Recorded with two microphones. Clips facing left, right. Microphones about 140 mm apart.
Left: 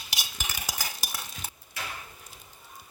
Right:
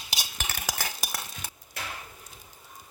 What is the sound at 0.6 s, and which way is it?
Stir, 65° right (ahead or behind).